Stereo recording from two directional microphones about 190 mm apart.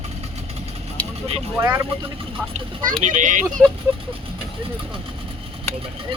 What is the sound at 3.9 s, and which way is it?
Speech, 10° right (ahead or behind).